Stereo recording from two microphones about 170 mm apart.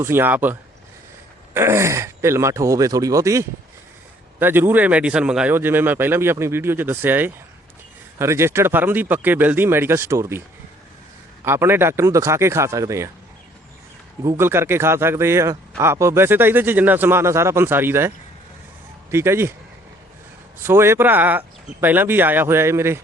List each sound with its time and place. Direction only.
0.0 s a man's voice: 15° right (ahead or behind)
1.5 s a man's voice: 15° right (ahead or behind)
11.4 s a man's voice: 15° right (ahead or behind)
14.3 s a man's voice: 15° right (ahead or behind)
19.1 s a man's voice: 15° right (ahead or behind)
20.6 s a man's voice: 15° right (ahead or behind)